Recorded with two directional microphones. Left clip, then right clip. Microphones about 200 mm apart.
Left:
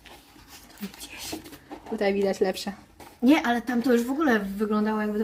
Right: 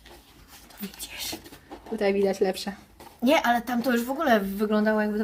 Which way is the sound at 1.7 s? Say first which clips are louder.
Right 1 dB; 5° left (ahead or behind).